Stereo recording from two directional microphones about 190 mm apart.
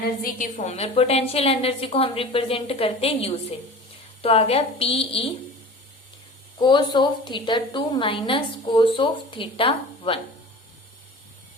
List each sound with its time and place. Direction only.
0.2 s a woman's voice: 45° left (ahead or behind); by 5.3 s 30° left (ahead or behind)
6.6 s a woman's voice: 25° left (ahead or behind)